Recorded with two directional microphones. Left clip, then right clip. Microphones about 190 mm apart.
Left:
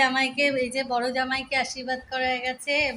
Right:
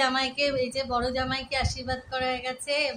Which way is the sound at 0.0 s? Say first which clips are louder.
Left 3 dB; centre (ahead or behind).